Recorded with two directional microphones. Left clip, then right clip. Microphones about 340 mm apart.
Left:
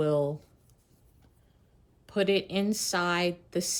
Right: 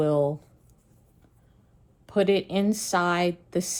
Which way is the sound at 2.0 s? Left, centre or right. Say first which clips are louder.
Right 4 dB; centre.